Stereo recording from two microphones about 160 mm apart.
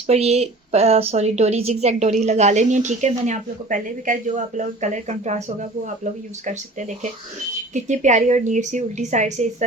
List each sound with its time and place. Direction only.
0.1 s a woman's voice: 40° right (ahead or behind)
7.7 s a woman's voice: 50° right (ahead or behind)